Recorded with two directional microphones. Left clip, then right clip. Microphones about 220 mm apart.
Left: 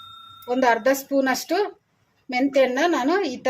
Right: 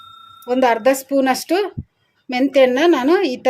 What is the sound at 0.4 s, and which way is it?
Speech, 30° right (ahead or behind).